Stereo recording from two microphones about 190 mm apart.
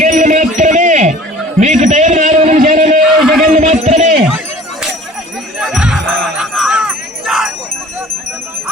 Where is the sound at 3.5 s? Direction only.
35° right (ahead or behind).